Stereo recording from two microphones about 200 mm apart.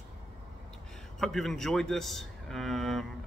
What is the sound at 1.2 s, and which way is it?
A man's voice, centre (ahead or behind).